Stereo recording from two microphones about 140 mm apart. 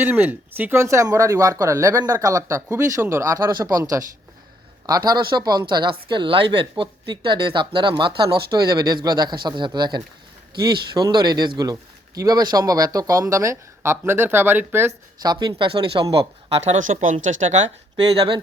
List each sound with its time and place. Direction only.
0.0 s speech: 15° right (ahead or behind)
15.2 s speech: 30° right (ahead or behind); by 17.7 s 55° right (ahead or behind)